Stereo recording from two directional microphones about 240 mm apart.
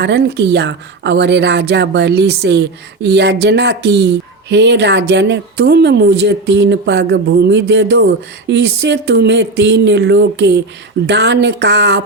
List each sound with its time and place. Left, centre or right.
0.0 s a woman's voice: right